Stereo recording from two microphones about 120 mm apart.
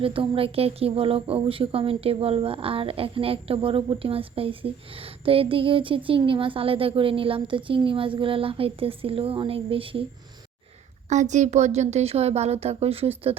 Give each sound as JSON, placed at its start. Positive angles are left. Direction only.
{"t": 0.0, "sound": "speech", "side_deg": -50}
{"t": 11.1, "sound": "speech", "side_deg": -80}